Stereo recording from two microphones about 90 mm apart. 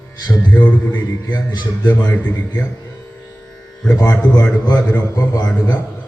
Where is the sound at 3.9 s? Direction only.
30° left (ahead or behind).